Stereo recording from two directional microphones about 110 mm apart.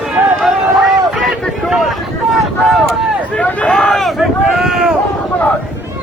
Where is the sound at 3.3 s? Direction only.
10° left (ahead or behind).